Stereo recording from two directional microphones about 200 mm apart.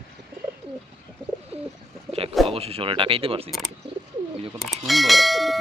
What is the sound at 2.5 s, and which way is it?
Speech, 30° right (ahead or behind).